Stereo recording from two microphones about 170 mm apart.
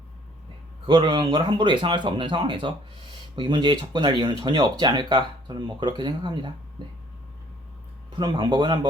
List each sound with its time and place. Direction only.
0.9 s speech: 30° right (ahead or behind)
8.1 s speech: 25° right (ahead or behind)